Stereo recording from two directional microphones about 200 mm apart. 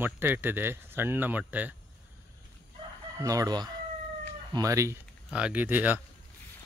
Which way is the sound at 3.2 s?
15° right (ahead or behind).